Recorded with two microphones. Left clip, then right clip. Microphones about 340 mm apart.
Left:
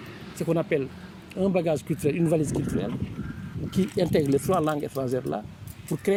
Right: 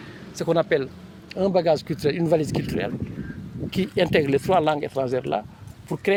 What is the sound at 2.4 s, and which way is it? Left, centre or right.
Speech, right.